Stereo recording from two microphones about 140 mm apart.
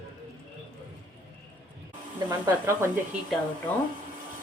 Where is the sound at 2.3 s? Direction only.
20° right (ahead or behind).